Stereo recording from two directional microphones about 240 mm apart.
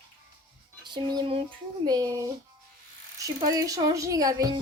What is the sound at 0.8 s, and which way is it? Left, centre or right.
Speech, centre.